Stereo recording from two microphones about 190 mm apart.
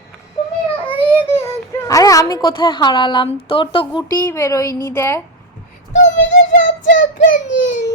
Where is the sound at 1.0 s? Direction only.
15° left (ahead or behind).